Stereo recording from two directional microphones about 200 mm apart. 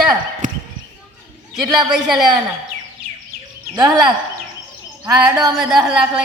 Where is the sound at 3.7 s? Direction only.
20° right (ahead or behind).